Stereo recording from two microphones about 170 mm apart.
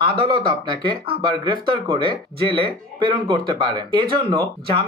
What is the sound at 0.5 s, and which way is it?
Speech, 30° right (ahead or behind).